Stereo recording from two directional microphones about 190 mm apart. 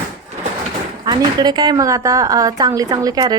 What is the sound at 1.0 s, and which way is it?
A woman's voice, 20° right (ahead or behind).